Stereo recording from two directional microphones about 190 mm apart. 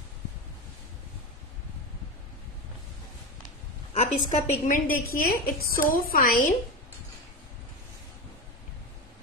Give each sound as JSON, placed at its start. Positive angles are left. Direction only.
{"t": 3.9, "sound": "a woman's voice", "side_deg": 35}
{"t": 4.6, "sound": "a woman's voice", "side_deg": 45}